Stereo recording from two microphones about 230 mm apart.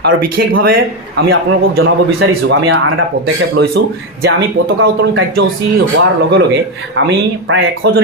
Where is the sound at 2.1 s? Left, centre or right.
Right.